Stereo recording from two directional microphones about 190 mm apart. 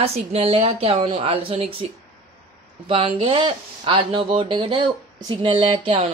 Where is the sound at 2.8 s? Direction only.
25° right (ahead or behind).